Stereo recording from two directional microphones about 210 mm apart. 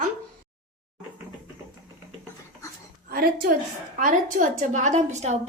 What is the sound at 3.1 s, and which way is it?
A woman's voice, 45° right (ahead or behind).